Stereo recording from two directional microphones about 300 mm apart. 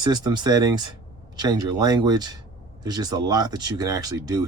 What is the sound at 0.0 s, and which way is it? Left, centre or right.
Speech, centre.